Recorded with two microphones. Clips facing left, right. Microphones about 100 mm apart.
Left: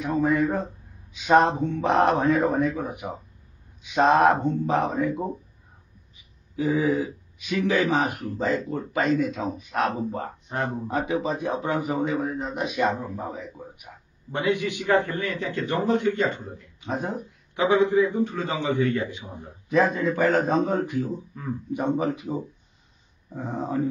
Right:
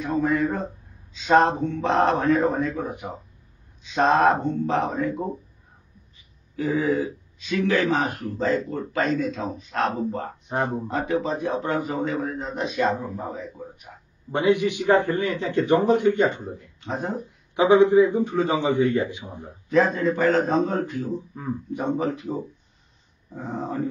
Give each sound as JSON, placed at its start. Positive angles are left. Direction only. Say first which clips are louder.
{"t": 0.2, "sound": "a man's voice", "louder": "left 1 dB", "side_deg": 20}
{"t": 6.5, "sound": "speech", "louder": "even", "side_deg": 15}
{"t": 10.5, "sound": "speech", "louder": "right 3 dB", "side_deg": -30}
{"t": 10.9, "sound": "speech", "louder": "right 1 dB", "side_deg": 15}
{"t": 14.3, "sound": "a man's voice", "louder": "right 4 dB", "side_deg": -20}
{"t": 16.8, "sound": "speech", "louder": "even", "side_deg": 10}
{"t": 17.6, "sound": "a man's voice", "louder": "right 4 dB", "side_deg": -20}
{"t": 19.7, "sound": "speech", "louder": "right 1 dB", "side_deg": 15}
{"t": 23.3, "sound": "a sound", "louder": "left 1 dB", "side_deg": 5}